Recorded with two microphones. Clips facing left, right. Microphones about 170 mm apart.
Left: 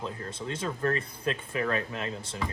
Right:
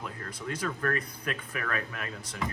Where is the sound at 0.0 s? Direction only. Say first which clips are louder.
Left 3 dB; 25° left (ahead or behind).